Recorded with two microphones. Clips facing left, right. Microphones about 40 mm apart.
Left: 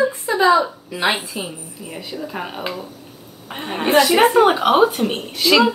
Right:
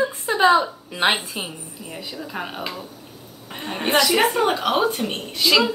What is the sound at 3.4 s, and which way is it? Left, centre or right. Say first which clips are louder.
A woman's voice: left 4 dB; left.